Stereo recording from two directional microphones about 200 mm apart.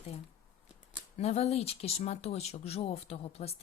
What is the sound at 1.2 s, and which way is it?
A woman's voice, 30° left (ahead or behind).